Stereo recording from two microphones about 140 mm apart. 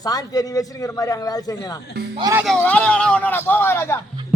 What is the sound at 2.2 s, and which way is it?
Speech, 30° right (ahead or behind).